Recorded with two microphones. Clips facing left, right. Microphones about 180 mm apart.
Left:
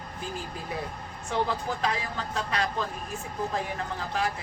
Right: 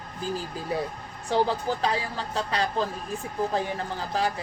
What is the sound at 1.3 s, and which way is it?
Speech, 35° right (ahead or behind).